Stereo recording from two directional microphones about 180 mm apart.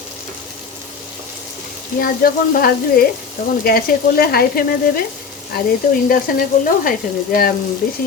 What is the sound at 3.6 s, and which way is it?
Frying, 55° left (ahead or behind).